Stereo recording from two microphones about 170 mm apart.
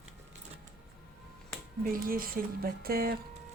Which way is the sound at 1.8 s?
55° right (ahead or behind).